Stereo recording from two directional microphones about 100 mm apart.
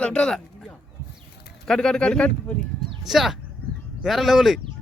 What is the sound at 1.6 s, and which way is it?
Speech, 5° left (ahead or behind).